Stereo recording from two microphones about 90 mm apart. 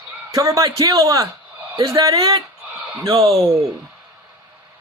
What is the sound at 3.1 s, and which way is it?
Speech, 90° right.